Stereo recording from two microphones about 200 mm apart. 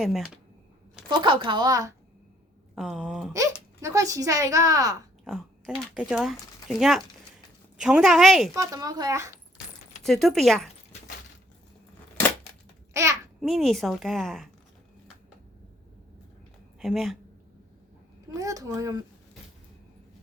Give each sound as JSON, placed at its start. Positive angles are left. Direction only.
{"t": 0.0, "sound": "a woman's voice", "side_deg": 0}
{"t": 1.0, "sound": "speech", "side_deg": -25}
{"t": 2.7, "sound": "a woman's voice", "side_deg": 0}
{"t": 3.3, "sound": "speech", "side_deg": -15}
{"t": 5.2, "sound": "a woman's voice", "side_deg": 0}
{"t": 8.5, "sound": "speech", "side_deg": -15}
{"t": 10.0, "sound": "a woman's voice", "side_deg": 0}
{"t": 12.9, "sound": "a child's voice", "side_deg": -15}
{"t": 13.4, "sound": "a woman's voice", "side_deg": 0}
{"t": 16.8, "sound": "a woman's voice", "side_deg": 0}
{"t": 18.3, "sound": "speech", "side_deg": -15}